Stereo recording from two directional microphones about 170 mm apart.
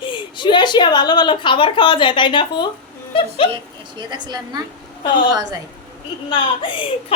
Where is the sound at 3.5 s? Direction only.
25° right (ahead or behind).